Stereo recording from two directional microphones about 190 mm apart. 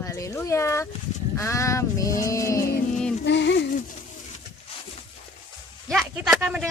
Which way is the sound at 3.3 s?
70° left (ahead or behind).